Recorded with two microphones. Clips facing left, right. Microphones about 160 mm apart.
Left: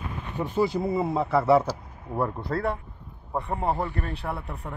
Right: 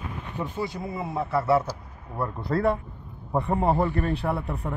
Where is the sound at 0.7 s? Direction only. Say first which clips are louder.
Left 5 dB; 30° left (ahead or behind).